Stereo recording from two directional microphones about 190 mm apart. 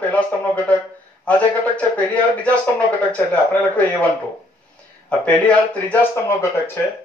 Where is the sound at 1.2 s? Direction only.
5° left (ahead or behind).